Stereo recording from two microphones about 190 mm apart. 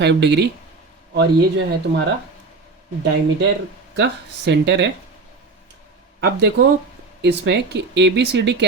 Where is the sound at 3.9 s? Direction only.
65° right (ahead or behind).